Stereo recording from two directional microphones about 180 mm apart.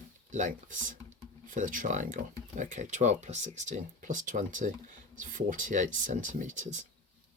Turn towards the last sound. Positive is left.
turn(degrees=-45)  # may be behind; listen again after turning